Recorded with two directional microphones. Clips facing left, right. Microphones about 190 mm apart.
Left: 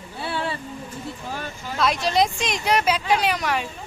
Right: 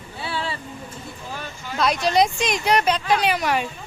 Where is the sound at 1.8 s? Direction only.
Centre (ahead or behind).